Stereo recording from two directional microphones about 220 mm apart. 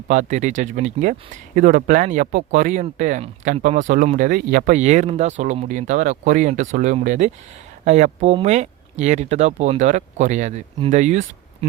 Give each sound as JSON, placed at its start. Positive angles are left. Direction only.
{"t": 0.1, "sound": "speech", "side_deg": -35}